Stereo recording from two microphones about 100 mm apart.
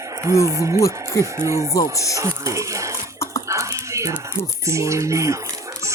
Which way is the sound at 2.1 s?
30° right (ahead or behind).